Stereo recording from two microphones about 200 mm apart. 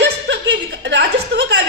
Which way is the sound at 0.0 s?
60° right (ahead or behind).